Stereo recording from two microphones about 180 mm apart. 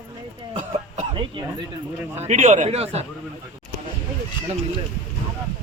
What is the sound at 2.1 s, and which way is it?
Speech, 40° right (ahead or behind).